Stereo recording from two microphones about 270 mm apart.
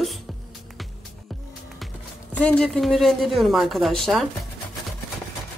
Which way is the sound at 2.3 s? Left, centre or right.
Centre.